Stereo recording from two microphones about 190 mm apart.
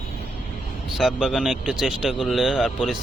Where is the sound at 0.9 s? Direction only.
Centre (ahead or behind).